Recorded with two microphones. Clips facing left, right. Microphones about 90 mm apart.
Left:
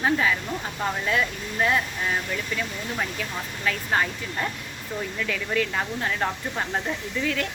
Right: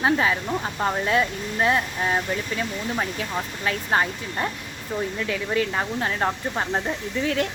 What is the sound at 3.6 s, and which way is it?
Speech, 30° right (ahead or behind).